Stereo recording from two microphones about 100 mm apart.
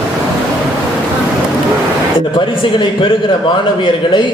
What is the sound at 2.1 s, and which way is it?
A man's voice, 60° left (ahead or behind).